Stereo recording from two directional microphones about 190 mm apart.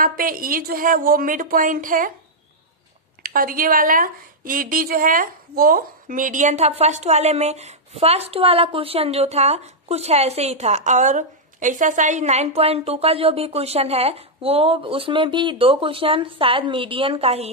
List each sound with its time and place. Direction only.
0.0 s a woman's voice: 50° right (ahead or behind)
3.2 s a woman's voice: 50° right (ahead or behind); by 17.5 s 30° right (ahead or behind)